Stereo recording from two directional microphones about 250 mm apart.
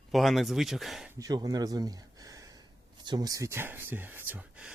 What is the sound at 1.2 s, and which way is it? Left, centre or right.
Speech, centre.